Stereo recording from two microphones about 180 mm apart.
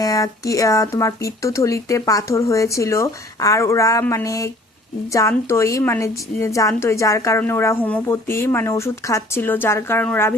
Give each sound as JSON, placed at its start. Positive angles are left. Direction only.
{"t": 0.0, "sound": "a woman's voice", "side_deg": 20}